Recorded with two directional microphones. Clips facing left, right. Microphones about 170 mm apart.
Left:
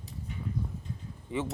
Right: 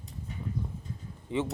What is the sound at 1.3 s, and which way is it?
Speech, 20° right (ahead or behind).